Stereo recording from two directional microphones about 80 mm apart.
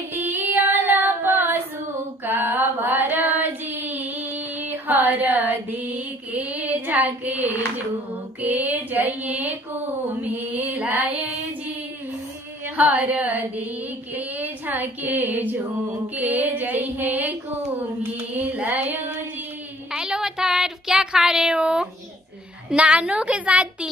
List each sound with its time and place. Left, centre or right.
0.1 s female singing: right
2.2 s a sound: right
8.4 s female singing: right
12.6 s female singing: centre
14.1 s a sound: right
16.2 s female singing: right
18.4 s female singing: right
19.9 s a sound: centre
22.7 s a woman's voice: centre